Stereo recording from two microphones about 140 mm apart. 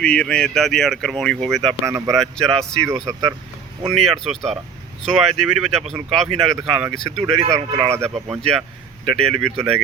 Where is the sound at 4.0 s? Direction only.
Centre (ahead or behind).